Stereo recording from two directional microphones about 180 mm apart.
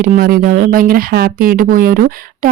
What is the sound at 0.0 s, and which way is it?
Speech, 50° right (ahead or behind).